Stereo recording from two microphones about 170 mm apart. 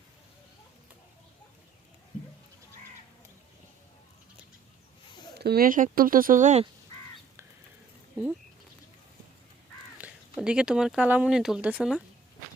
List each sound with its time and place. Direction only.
5.4 s speech: 65° right (ahead or behind); by 6.7 s 45° right (ahead or behind)
10.0 s speech: 5° right (ahead or behind)